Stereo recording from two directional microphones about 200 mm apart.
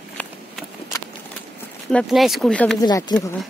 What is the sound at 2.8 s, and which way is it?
Speech, 20° left (ahead or behind).